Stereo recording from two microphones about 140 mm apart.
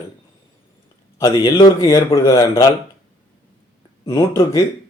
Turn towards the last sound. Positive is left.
turn(degrees=20)  # may be behind; listen again after turning